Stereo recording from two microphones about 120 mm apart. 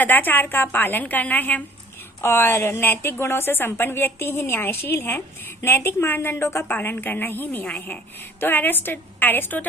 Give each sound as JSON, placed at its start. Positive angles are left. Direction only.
{"t": 0.0, "sound": "a woman's voice", "side_deg": 15}